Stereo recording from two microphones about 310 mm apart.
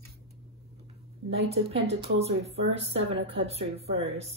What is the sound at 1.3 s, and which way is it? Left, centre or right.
A woman's voice, centre.